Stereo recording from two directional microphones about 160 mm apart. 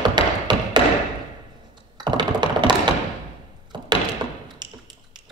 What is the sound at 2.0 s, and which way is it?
Computer keyboard, 30° right (ahead or behind).